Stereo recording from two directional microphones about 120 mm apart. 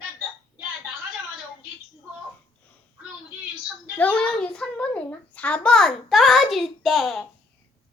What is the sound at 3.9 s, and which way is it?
A child's voice, 15° left (ahead or behind).